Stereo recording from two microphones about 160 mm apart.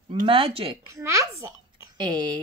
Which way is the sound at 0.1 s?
35° right (ahead or behind).